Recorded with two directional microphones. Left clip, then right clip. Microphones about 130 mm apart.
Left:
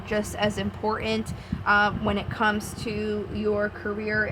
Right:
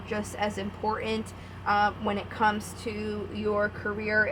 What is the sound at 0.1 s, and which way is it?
A woman's voice, 40° left (ahead or behind).